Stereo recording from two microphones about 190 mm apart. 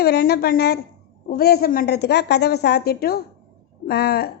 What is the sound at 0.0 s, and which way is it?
A woman's voice, 55° left (ahead or behind).